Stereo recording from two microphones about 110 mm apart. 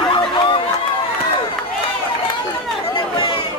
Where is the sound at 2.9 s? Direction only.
45° left (ahead or behind).